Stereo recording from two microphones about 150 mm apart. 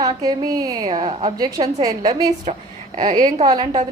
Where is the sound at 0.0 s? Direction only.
25° right (ahead or behind).